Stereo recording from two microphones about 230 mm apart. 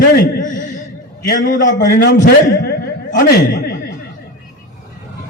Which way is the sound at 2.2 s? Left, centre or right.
Left.